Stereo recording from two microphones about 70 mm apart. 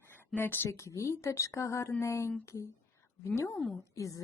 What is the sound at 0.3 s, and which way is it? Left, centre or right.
Speech, left.